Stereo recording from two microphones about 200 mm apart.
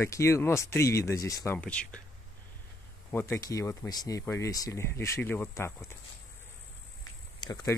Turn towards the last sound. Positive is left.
turn(degrees=20)  # may be behind; listen again after turning